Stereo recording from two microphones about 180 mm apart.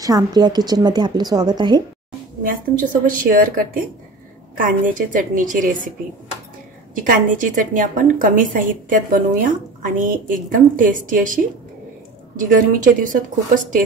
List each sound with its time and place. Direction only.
0.0 s a woman's voice: 20° right (ahead or behind)
2.4 s a woman's voice: 50° right (ahead or behind)
7.0 s a woman's voice: 50° right (ahead or behind)